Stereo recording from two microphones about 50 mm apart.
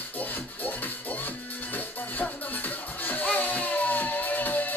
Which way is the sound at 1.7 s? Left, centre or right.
Left.